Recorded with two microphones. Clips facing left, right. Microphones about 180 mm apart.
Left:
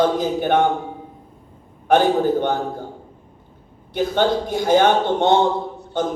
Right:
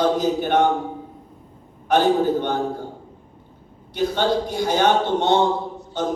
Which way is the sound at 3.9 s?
50° left (ahead or behind).